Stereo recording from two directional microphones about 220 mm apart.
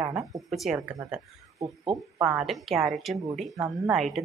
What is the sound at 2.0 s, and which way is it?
A woman's voice, 5° right (ahead or behind).